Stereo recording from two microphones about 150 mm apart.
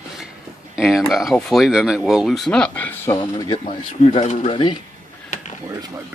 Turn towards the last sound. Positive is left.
turn(degrees=-25)  # may be behind; listen again after turning